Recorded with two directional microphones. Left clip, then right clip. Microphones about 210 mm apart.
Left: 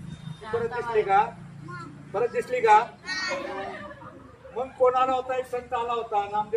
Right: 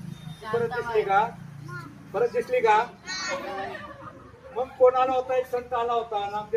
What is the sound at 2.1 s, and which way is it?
Speech, 15° left (ahead or behind).